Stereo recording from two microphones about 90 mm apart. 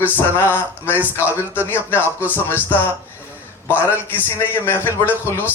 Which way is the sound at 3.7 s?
20° left (ahead or behind).